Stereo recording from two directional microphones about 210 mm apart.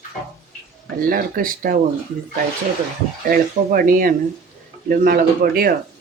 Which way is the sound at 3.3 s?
45° right (ahead or behind).